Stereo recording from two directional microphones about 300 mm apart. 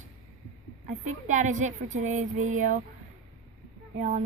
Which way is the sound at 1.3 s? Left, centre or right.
Right.